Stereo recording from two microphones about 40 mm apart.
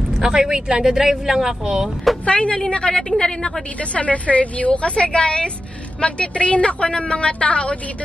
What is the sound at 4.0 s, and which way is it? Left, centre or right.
A woman's voice, left.